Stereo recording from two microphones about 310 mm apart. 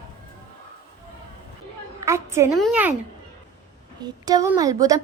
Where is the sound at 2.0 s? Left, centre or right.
Centre.